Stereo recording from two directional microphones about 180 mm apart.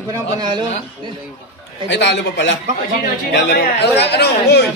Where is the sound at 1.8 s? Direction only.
75° left (ahead or behind).